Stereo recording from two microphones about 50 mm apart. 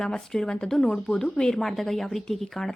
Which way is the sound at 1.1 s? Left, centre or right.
Centre.